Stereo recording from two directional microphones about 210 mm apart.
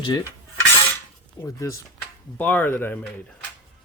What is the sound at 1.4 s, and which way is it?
Speech, 15° left (ahead or behind).